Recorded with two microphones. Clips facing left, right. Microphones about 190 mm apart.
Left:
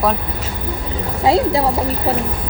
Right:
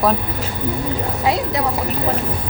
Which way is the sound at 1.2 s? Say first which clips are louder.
Left 6 dB; 30° left (ahead or behind).